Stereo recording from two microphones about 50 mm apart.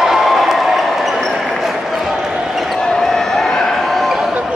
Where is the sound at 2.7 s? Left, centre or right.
Centre.